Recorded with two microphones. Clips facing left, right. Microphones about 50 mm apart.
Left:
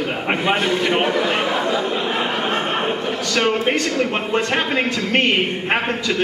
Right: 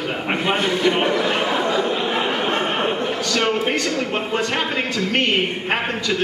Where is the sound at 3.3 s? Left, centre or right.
Centre.